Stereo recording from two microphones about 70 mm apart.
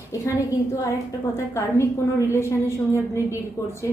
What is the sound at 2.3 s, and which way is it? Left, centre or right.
Speech, left.